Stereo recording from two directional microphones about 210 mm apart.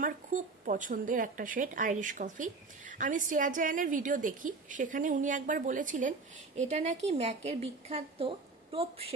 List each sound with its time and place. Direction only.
0.0 s a woman's voice: 40° right (ahead or behind)